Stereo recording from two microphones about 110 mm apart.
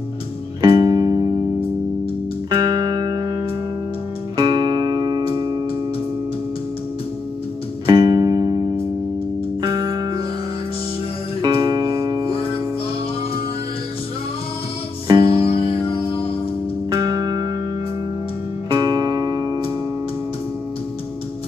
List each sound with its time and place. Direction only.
0.6 s music: 40° right (ahead or behind)
2.5 s music: 40° right (ahead or behind)
7.8 s music: 40° right (ahead or behind)
11.4 s music: 40° right (ahead or behind)
15.0 s music: 40° right (ahead or behind)
15.9 s music: 60° left (ahead or behind)
16.9 s music: 40° right (ahead or behind)
18.7 s music: 40° right (ahead or behind)